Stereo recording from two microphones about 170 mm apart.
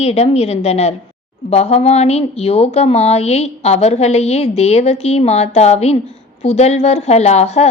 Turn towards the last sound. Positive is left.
turn(degrees=40)  # may be behind; listen again after turning